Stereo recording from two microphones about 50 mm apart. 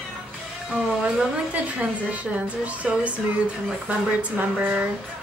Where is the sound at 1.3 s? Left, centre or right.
Right.